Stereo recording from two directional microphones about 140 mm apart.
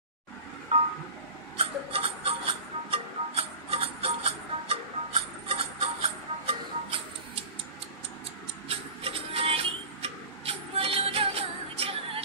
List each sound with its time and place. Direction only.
1.6 s a sound: 45° right (ahead or behind)
2.9 s music: 45° right (ahead or behind)
8.6 s music: 40° right (ahead or behind)